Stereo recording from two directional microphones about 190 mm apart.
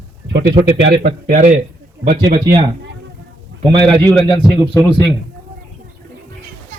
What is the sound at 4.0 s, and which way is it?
Speech, 10° left (ahead or behind).